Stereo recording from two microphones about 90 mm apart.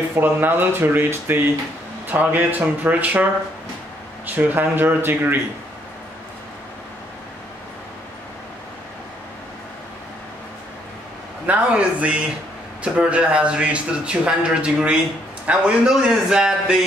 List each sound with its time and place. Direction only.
0.1 s speech: 25° right (ahead or behind)
4.3 s speech: 20° right (ahead or behind)
11.4 s a man's voice: 15° right (ahead or behind)